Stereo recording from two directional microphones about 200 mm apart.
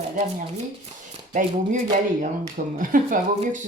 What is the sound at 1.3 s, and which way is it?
Speech, 40° right (ahead or behind).